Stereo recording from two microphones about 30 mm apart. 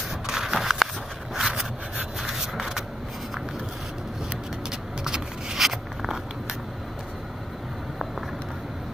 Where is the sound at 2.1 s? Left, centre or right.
Centre.